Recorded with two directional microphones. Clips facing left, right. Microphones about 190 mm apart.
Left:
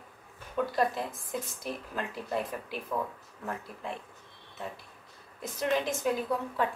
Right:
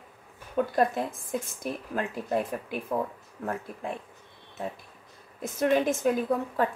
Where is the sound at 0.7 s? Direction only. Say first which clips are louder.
Right 4 dB; 50° right (ahead or behind).